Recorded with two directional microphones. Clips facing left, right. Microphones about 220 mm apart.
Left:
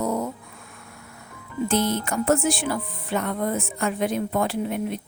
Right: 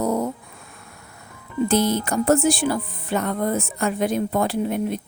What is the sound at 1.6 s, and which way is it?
Speech, 35° right (ahead or behind).